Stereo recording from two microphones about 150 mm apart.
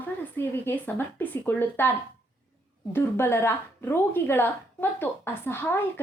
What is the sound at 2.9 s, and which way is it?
A woman's voice, 15° left (ahead or behind).